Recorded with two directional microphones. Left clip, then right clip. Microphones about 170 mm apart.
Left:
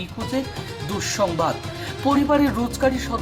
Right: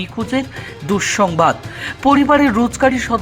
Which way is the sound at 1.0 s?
45° right (ahead or behind).